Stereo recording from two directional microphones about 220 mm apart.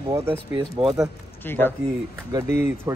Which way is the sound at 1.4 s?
10° left (ahead or behind).